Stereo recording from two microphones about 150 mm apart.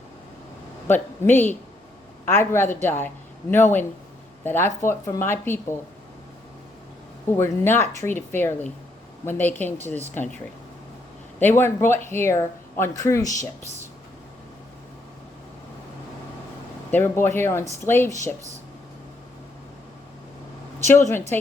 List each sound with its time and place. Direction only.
0.9 s speech: 15° left (ahead or behind)
7.3 s speech: 15° left (ahead or behind)
11.3 s a man's voice: 15° left (ahead or behind)
16.9 s speech: 15° left (ahead or behind)
20.8 s speech: 15° left (ahead or behind)